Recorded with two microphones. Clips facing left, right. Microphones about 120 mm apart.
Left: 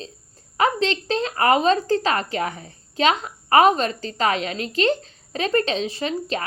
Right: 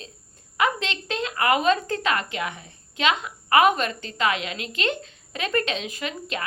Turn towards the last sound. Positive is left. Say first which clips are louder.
# left 6 dB
turn(degrees=35)  # may be behind; listen again after turning